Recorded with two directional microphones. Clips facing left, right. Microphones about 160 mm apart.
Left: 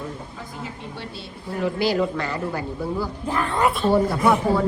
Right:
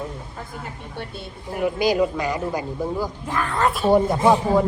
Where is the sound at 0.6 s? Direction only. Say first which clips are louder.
Left 3 dB; 55° right (ahead or behind).